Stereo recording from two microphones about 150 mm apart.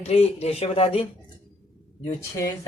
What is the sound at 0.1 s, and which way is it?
Speech, 45° left (ahead or behind).